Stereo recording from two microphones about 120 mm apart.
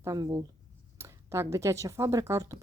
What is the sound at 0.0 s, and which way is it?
Speech, 30° right (ahead or behind).